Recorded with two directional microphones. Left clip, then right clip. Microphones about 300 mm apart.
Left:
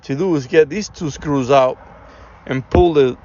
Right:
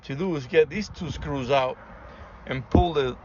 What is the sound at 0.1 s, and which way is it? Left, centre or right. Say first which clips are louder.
Speech: left 9 dB; centre.